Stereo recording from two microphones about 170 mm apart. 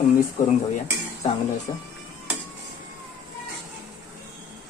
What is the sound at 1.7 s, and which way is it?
Speech, 35° left (ahead or behind).